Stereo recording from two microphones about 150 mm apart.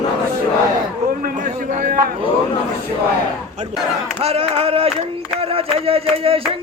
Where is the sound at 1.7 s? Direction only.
60° right (ahead or behind).